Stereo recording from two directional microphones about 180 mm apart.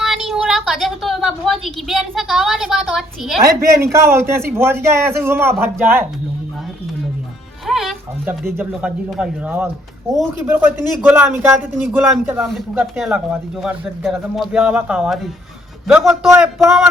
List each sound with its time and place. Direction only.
0.0 s a woman's voice: centre (ahead or behind)
3.4 s a man's voice: 15° right (ahead or behind)
7.7 s music: centre (ahead or behind)
9.0 s a man's voice: 5° right (ahead or behind)